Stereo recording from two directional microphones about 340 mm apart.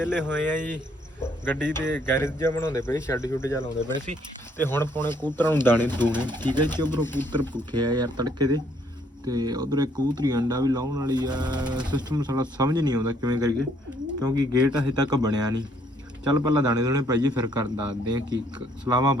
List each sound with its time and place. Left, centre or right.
0.0 s speech: centre
6.9 s speech: centre
7.5 s speech: centre